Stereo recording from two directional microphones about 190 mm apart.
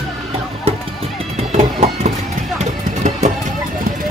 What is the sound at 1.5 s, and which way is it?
Music, 35° right (ahead or behind).